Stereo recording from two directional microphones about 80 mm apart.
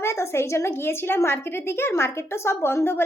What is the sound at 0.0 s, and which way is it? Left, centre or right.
A woman's voice, left.